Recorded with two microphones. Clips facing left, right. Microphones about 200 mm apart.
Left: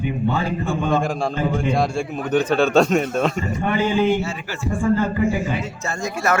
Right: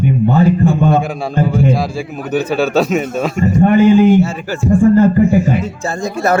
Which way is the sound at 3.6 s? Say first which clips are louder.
Right 11 dB; 45° right (ahead or behind).